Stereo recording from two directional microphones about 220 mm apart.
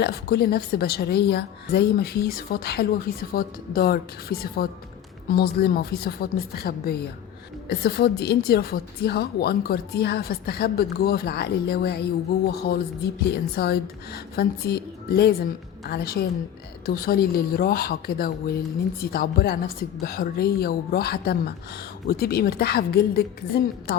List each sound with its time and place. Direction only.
0.0 s a woman's voice: 45° left (ahead or behind)